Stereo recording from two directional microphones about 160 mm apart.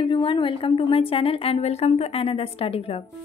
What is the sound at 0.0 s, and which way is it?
A woman's voice, 30° left (ahead or behind).